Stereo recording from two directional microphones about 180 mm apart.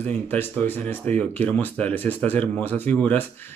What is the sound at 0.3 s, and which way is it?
Speech, 10° left (ahead or behind).